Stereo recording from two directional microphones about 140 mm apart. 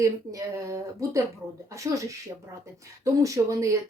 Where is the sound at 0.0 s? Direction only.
25° right (ahead or behind).